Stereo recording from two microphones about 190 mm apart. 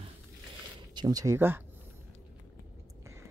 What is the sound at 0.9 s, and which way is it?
Speech, 20° right (ahead or behind).